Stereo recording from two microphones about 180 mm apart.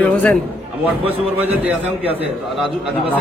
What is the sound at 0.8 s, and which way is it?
A man's voice, 10° right (ahead or behind).